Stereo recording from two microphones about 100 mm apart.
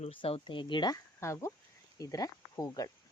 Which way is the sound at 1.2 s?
30° left (ahead or behind).